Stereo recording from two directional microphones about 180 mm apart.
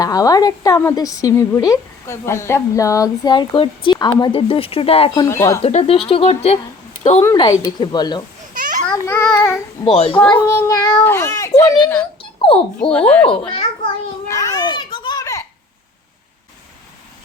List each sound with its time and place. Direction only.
0.0 s a woman's voice: 20° left (ahead or behind)
5.3 s a child's voice: 15° left (ahead or behind)
5.6 s speech: 30° left (ahead or behind)
7.8 s a woman's voice: 25° left (ahead or behind)
8.9 s a child's voice: 10° left (ahead or behind)
9.8 s speech: 30° left (ahead or behind)
10.2 s a child's voice: 10° left (ahead or behind)
12.2 s dog: 30° left (ahead or behind)
12.8 s speech: 5° left (ahead or behind)
13.6 s children playing: 20° left (ahead or behind)